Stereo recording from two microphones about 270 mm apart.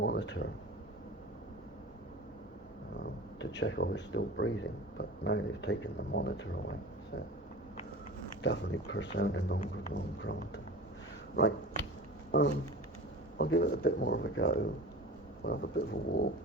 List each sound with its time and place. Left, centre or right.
0.0 s a sound: left
3.0 s speech: left
8.4 s speech: left
11.3 s speech: left